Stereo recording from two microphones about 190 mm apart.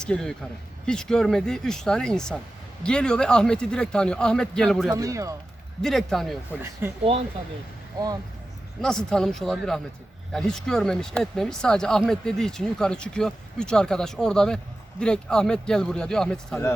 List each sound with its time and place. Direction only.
0.0 s speech: 5° left (ahead or behind)
4.9 s speech: 15° right (ahead or behind)
5.8 s speech: centre (ahead or behind)
7.0 s speech: 30° right (ahead or behind)
8.8 s speech: 5° left (ahead or behind)